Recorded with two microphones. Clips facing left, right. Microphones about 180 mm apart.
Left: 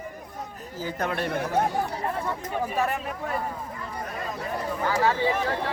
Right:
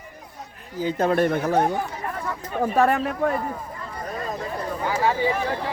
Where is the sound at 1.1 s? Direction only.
55° right (ahead or behind).